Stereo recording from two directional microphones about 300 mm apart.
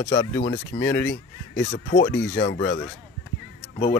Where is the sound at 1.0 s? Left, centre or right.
Left.